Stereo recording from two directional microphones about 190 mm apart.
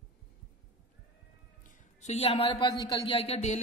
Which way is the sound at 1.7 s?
40° left (ahead or behind).